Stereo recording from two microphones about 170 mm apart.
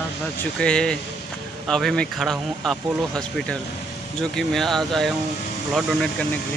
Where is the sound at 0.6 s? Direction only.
5° left (ahead or behind).